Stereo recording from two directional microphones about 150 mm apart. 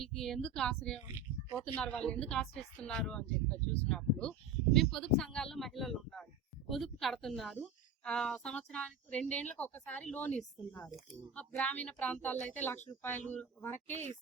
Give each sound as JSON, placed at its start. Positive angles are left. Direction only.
{"t": 0.2, "sound": "a woman's voice", "side_deg": 0}